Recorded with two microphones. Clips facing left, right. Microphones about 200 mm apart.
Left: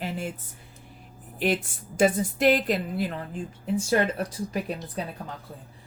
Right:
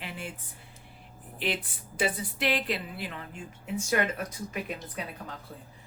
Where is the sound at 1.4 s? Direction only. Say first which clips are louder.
Left 7 dB; 45° left (ahead or behind).